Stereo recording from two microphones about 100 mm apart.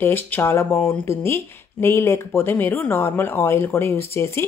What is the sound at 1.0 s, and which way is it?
Speech, 25° left (ahead or behind).